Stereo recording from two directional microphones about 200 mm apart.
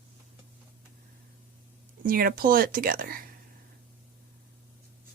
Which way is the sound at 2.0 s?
45° right (ahead or behind).